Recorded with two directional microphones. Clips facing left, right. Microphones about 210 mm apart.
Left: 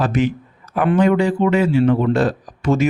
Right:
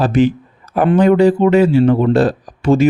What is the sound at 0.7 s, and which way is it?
Speech, 35° right (ahead or behind).